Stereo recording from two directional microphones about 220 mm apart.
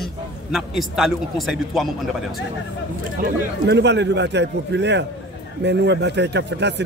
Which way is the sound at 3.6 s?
50° right (ahead or behind).